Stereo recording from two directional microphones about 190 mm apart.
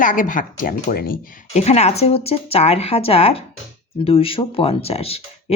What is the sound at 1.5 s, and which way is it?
Speech, 35° left (ahead or behind).